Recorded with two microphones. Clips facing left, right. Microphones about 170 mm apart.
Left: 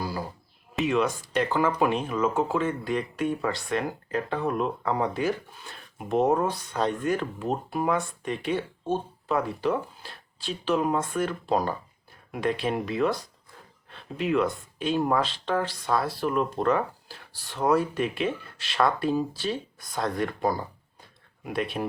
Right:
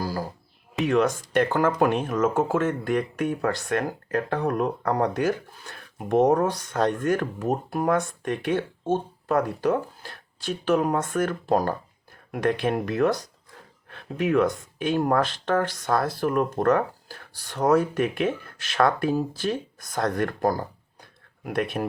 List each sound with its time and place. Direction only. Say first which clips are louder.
0.0 s a sound: right 3 dB; 40° right (ahead or behind)
0.9 s speech: right 4 dB; 45° right (ahead or behind)
4.4 s speech: right 2 dB; 65° right (ahead or behind)
5.3 s speech: right 2 dB; 80° right
6.7 s speech: right 3 dB; 55° right (ahead or behind)
13.9 s a sound: right 3 dB; 60° right (ahead or behind)
14.5 s speech: right 2 dB; 55° right (ahead or behind)